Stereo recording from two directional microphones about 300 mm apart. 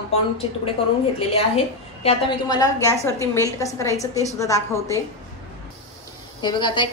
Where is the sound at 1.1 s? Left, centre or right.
Centre.